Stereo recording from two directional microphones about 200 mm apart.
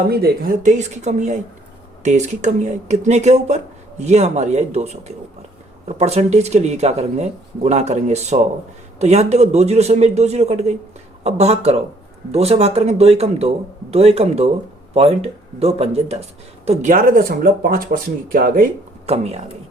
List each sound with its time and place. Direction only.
0.1 s speech: 50° right (ahead or behind)
19.0 s speech: 30° right (ahead or behind)